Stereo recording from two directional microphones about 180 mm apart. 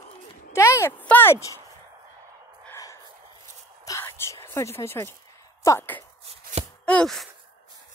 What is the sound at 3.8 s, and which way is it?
Whispering, 15° left (ahead or behind).